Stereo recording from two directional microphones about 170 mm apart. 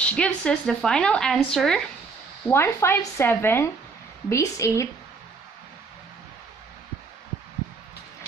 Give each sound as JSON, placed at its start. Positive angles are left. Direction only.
{"t": 0.0, "sound": "speech", "side_deg": 5}
{"t": 2.4, "sound": "speech", "side_deg": 15}